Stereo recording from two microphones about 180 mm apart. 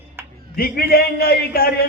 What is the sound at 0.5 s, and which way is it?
A man's voice, 55° left (ahead or behind).